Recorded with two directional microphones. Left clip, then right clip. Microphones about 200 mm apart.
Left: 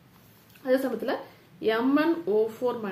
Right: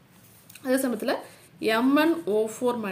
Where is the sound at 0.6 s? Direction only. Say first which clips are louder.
Even; 40° right (ahead or behind).